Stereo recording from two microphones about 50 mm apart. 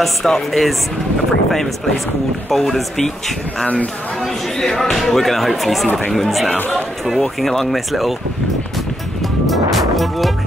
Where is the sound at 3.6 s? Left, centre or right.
Left.